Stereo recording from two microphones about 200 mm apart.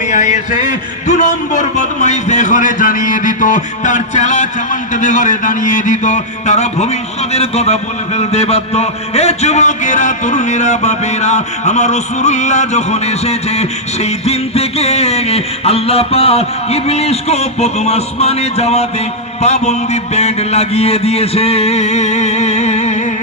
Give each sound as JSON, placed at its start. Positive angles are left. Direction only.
{"t": 0.1, "sound": "a man's voice", "side_deg": 40}